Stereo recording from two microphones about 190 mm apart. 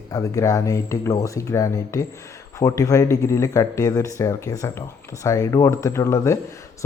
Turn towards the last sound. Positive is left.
turn(degrees=15)  # may be behind; listen again after turning